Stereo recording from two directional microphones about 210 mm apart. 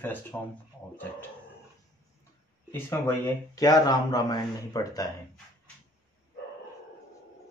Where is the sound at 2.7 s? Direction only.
10° left (ahead or behind).